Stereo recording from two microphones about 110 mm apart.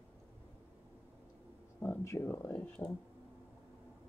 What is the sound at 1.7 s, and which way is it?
Speech, 20° left (ahead or behind).